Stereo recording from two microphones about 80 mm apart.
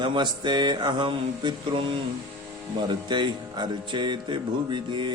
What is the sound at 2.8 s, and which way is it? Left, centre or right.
Speech, right.